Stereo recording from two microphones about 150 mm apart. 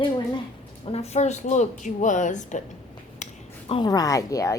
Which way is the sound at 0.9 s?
45° left (ahead or behind).